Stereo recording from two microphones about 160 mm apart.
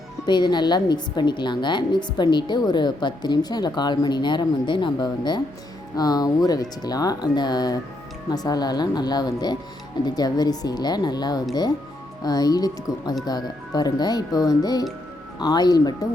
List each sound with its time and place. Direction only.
0.3 s a woman's voice: 30° left (ahead or behind)